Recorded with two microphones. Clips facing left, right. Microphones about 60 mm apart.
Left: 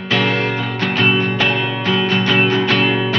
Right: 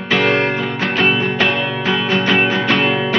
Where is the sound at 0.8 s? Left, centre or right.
Centre.